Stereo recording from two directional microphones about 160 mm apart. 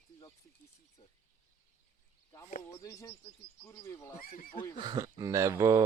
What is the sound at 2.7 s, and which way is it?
Bird, 20° left (ahead or behind).